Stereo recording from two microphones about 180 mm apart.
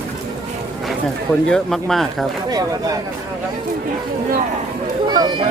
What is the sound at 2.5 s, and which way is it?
Speech, 20° right (ahead or behind).